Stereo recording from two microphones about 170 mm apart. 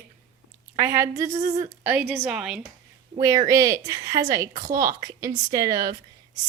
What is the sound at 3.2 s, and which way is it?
Speech, 20° right (ahead or behind).